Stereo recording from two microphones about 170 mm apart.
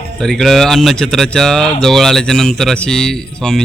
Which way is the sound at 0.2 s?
Centre (ahead or behind).